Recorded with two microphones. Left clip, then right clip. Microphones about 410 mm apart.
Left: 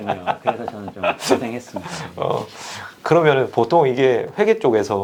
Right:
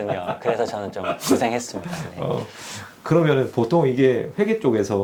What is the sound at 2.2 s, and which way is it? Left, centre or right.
Speech, left.